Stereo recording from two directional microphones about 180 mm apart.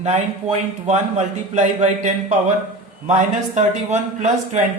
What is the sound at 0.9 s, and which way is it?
A man's voice, 40° right (ahead or behind).